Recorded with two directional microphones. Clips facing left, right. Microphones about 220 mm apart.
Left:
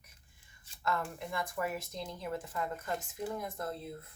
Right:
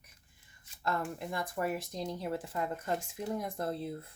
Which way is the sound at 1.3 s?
35° right (ahead or behind).